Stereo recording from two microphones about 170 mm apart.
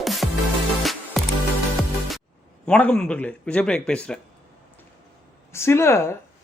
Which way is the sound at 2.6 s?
5° left (ahead or behind).